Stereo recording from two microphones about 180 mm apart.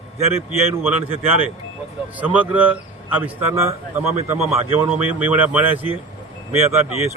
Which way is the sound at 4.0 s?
35° right (ahead or behind).